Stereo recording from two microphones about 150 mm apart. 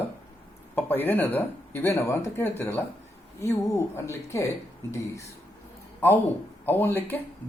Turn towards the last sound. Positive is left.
turn(degrees=15)  # may be behind; listen again after turning